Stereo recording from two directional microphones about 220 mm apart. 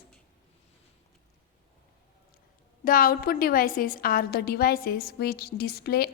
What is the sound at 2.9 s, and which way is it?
A woman's voice, 40° left (ahead or behind).